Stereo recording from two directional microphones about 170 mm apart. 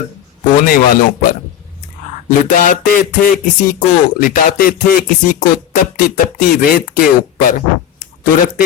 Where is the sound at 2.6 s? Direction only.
55° left (ahead or behind).